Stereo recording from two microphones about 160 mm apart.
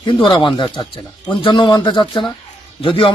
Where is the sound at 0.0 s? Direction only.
30° left (ahead or behind).